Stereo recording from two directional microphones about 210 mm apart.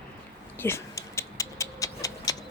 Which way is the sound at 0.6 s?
10° left (ahead or behind).